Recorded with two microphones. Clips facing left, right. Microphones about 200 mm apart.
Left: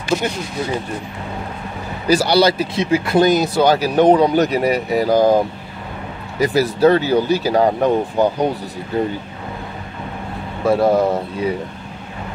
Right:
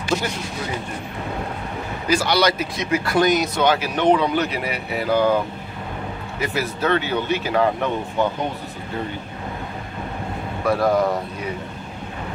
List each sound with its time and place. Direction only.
0.1 s speech: 10° left (ahead or behind)
2.0 s speech: 35° left (ahead or behind)
6.4 s speech: 35° left (ahead or behind)
10.6 s speech: 25° left (ahead or behind)